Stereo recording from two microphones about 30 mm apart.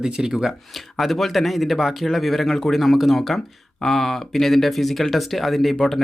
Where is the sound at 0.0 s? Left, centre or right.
Right.